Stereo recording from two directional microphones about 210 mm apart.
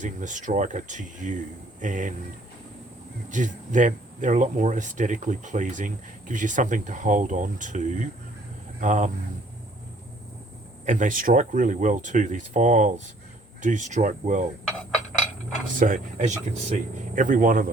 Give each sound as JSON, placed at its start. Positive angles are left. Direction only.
{"t": 0.0, "sound": "speech", "side_deg": -35}
{"t": 3.2, "sound": "speech", "side_deg": -35}
{"t": 10.8, "sound": "speech", "side_deg": -40}
{"t": 15.8, "sound": "speech", "side_deg": -35}